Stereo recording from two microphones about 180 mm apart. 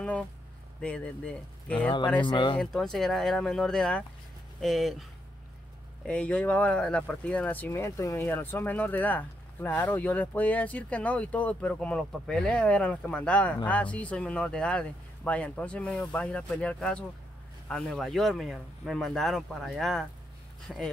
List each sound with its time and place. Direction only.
0.7 s speech: 5° left (ahead or behind)
1.9 s speech: 25° left (ahead or behind)
2.6 s speech: centre (ahead or behind)
6.0 s speech: 5° left (ahead or behind)